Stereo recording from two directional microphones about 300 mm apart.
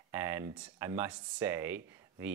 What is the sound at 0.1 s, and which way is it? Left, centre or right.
Speech, centre.